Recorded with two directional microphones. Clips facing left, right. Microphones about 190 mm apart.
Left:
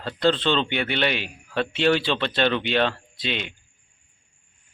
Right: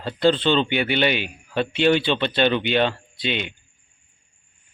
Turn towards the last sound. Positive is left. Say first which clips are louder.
# right 3 dB
turn(degrees=0)  # may be behind; listen again after turning